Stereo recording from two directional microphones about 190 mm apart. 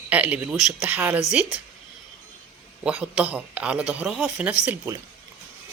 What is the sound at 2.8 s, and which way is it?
Speech, 5° right (ahead or behind).